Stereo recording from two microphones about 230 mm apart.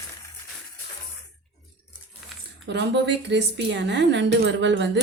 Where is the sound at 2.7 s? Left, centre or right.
Right.